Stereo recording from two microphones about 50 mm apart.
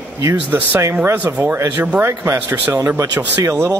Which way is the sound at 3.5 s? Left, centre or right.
Right.